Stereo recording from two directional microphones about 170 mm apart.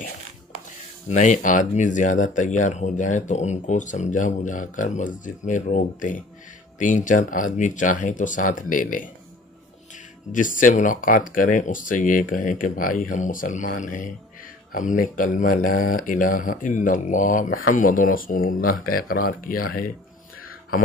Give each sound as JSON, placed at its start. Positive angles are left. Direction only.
{"t": 1.0, "sound": "speech", "side_deg": 45}
{"t": 10.3, "sound": "speech", "side_deg": 50}